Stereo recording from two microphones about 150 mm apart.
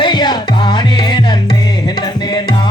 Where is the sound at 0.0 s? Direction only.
30° left (ahead or behind).